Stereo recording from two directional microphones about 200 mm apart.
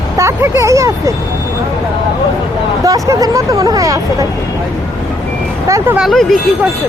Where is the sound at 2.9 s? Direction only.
15° right (ahead or behind).